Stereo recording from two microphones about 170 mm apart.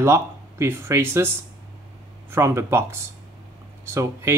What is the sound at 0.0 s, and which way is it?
Speech, 15° right (ahead or behind).